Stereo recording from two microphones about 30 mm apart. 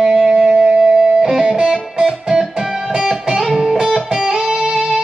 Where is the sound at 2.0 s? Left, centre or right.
Centre.